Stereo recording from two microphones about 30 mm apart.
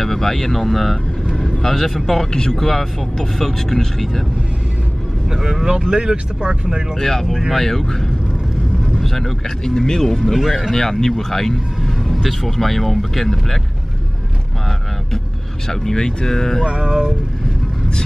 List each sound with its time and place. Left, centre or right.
0.0 s speech: centre
5.4 s speech: centre
5.7 s speech: right
7.0 s speech: centre
9.0 s speech: centre
9.8 s speech: centre
10.3 s speech: centre
10.7 s speech: centre
15.7 s speech: centre
16.6 s music: right